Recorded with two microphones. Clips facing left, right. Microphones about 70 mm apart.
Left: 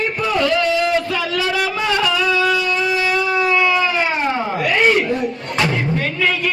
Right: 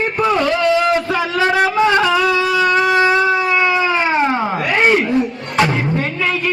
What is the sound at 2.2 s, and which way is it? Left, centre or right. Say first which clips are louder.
Wind instrument: right 2 dB; right.